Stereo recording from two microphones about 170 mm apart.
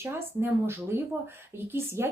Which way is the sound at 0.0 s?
15° right (ahead or behind).